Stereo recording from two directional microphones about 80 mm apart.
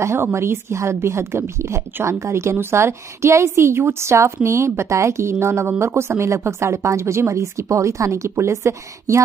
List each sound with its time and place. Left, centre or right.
0.0 s a woman's voice: right